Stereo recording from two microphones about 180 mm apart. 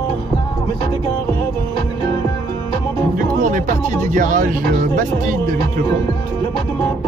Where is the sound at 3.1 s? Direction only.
45° right (ahead or behind).